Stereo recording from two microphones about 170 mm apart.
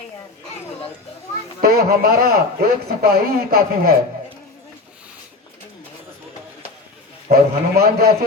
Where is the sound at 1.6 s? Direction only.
65° right (ahead or behind).